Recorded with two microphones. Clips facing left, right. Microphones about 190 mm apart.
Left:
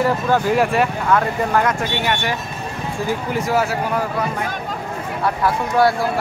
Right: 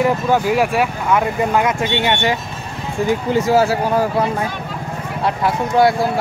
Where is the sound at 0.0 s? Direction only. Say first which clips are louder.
Right 2 dB; 10° right (ahead or behind); by 4.0 s 30° right (ahead or behind).